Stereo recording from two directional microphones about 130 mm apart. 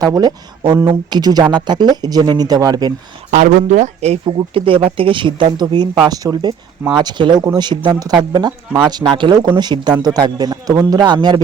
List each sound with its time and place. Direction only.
0.0 s speech: 30° right (ahead or behind)
3.3 s speech: 75° right (ahead or behind)
4.3 s speech: 45° right (ahead or behind)